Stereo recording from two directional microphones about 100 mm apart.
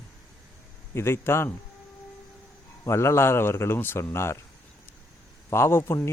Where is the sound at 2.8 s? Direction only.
25° left (ahead or behind).